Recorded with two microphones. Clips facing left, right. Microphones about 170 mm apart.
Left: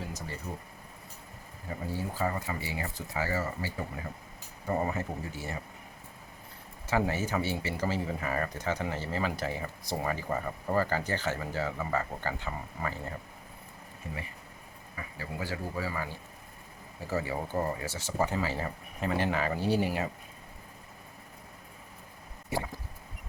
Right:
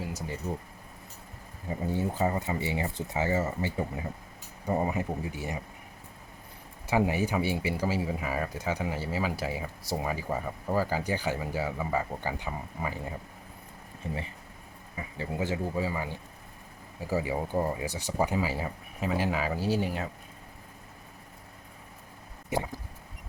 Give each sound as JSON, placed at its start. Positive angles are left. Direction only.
{"t": 1.7, "sound": "speech", "side_deg": -20}
{"t": 6.8, "sound": "speech", "side_deg": -15}
{"t": 14.0, "sound": "speech", "side_deg": -25}